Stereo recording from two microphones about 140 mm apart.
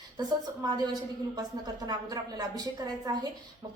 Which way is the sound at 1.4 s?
25° right (ahead or behind).